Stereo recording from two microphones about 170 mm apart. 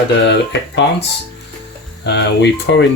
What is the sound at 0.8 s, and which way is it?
Speech, 80° left.